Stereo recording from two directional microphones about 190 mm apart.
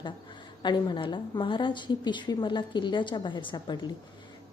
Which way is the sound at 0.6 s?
25° left (ahead or behind).